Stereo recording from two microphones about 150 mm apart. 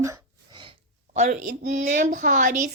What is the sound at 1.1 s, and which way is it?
A woman's voice, 55° right (ahead or behind).